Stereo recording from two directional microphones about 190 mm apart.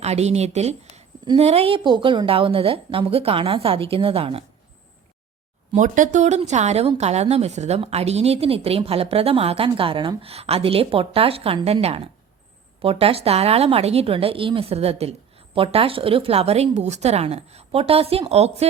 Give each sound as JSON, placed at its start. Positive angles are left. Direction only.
{"t": 0.0, "sound": "a sound", "side_deg": -35}
{"t": 1.4, "sound": "a woman's voice", "side_deg": -35}
{"t": 5.7, "sound": "a woman's voice", "side_deg": -40}